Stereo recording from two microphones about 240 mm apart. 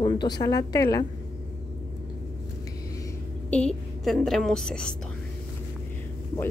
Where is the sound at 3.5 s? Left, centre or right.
Centre.